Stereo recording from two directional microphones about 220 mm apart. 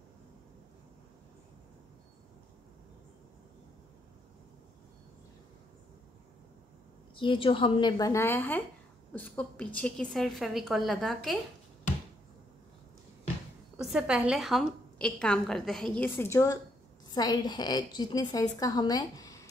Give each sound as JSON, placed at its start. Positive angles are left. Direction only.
{"t": 7.2, "sound": "a woman's voice", "side_deg": 25}
{"t": 13.7, "sound": "a woman's voice", "side_deg": -5}